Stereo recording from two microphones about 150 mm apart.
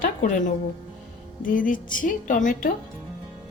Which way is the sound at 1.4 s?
60° left (ahead or behind).